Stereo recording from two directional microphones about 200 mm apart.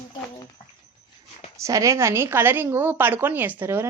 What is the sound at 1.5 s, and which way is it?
A woman's voice, 15° right (ahead or behind).